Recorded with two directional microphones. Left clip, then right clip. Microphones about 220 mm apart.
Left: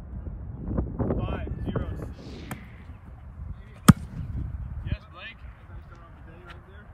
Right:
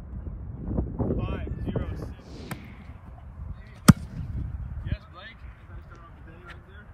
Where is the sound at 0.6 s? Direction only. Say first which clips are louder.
Even; 20° right (ahead or behind).